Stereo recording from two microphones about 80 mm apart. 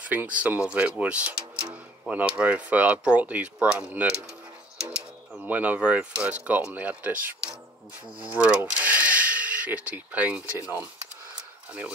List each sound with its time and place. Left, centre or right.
0.1 s speech: centre
5.4 s speech: centre